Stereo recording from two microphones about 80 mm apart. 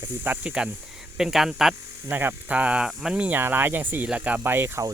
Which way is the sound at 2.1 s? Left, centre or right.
Right.